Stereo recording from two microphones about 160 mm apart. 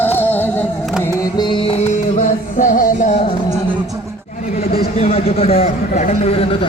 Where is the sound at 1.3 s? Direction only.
30° left (ahead or behind).